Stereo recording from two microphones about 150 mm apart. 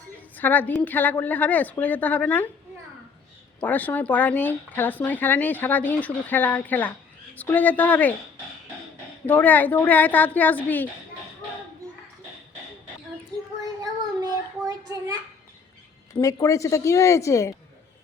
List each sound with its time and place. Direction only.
0.3 s speech: 10° left (ahead or behind)
3.6 s speech: 10° left (ahead or behind)
9.2 s speech: 10° left (ahead or behind)
13.8 s child singing: 25° right (ahead or behind)
16.2 s speech: 20° left (ahead or behind)